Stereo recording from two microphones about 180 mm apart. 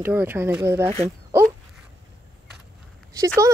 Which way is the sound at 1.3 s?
15° right (ahead or behind).